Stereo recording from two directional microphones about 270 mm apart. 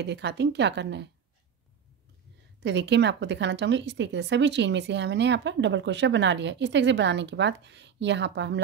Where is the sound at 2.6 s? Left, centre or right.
Right.